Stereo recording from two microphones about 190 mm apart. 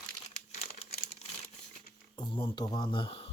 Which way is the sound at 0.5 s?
35° left (ahead or behind).